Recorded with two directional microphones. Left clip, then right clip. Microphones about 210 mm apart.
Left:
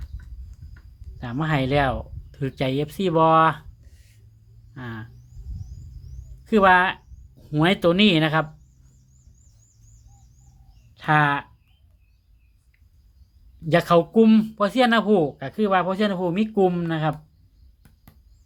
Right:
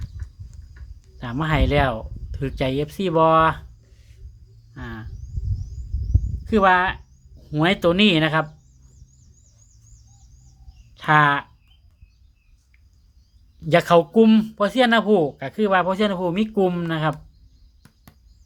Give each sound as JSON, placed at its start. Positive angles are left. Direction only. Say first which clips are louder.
{"t": 1.2, "sound": "speech", "louder": "right 2 dB", "side_deg": -5}
{"t": 4.7, "sound": "a sound", "louder": "even", "side_deg": 10}
{"t": 6.4, "sound": "speech", "louder": "left 1 dB", "side_deg": 10}
{"t": 10.9, "sound": "speech", "louder": "right 3 dB", "side_deg": -5}
{"t": 13.6, "sound": "speech", "louder": "right 2 dB", "side_deg": -5}